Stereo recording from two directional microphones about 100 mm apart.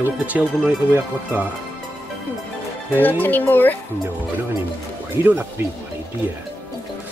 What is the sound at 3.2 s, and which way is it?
Speech, 20° left (ahead or behind).